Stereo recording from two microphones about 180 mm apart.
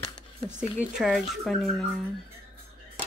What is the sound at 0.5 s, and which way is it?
Speech, 5° right (ahead or behind).